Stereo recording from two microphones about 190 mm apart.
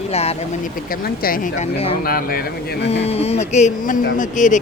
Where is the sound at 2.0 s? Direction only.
50° left (ahead or behind).